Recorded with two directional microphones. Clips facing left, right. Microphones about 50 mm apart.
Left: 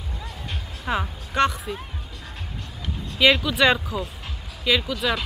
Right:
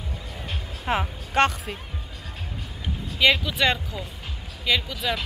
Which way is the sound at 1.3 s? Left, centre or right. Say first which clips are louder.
Even; right.